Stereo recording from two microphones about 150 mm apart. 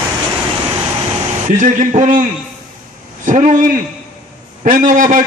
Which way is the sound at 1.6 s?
55° right (ahead or behind).